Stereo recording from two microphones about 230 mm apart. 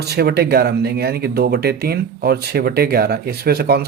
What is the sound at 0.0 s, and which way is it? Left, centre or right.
Speech, right.